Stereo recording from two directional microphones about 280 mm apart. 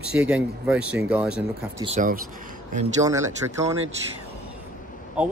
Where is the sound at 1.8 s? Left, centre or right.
Right.